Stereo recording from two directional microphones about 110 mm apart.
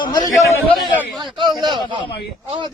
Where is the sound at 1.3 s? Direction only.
40° right (ahead or behind).